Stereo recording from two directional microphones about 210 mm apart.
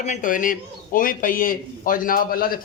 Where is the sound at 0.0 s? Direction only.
35° left (ahead or behind).